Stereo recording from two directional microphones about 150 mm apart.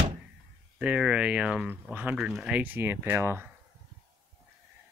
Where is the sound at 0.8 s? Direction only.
5° right (ahead or behind).